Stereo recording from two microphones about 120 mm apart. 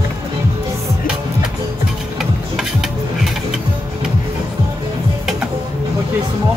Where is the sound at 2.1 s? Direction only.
Centre (ahead or behind).